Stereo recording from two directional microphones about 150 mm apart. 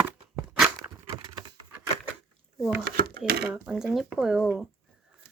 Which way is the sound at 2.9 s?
90° right.